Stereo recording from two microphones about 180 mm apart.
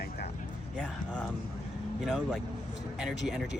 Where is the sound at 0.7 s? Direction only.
5° left (ahead or behind).